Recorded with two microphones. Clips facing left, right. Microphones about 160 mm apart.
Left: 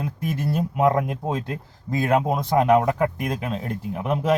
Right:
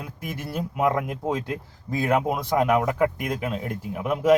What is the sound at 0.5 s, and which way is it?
Speech, 25° left (ahead or behind).